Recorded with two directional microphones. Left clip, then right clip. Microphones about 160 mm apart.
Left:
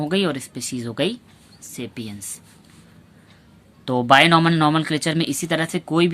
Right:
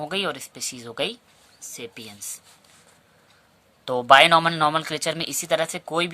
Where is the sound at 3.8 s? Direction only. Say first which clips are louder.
Even; 25° right (ahead or behind).